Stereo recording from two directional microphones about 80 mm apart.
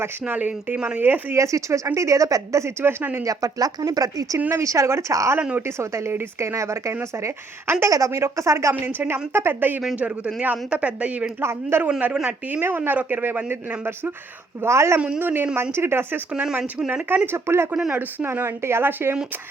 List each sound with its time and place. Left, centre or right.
0.0 s speech: right
1.4 s speech: right
2.8 s speech: right
3.2 s speech: right
5.4 s speech: centre
5.6 s speech: right
8.8 s speech: right
11.3 s speech: right
11.9 s speech: centre
12.6 s speech: right
14.9 s speech: centre
15.2 s speech: right
16.3 s speech: centre
17.1 s speech: right